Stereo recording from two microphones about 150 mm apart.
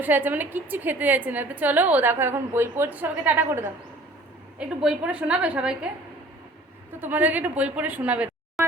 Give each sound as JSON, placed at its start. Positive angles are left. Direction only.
{"t": 0.0, "sound": "a woman's voice", "side_deg": -10}
{"t": 7.0, "sound": "a woman's voice", "side_deg": -10}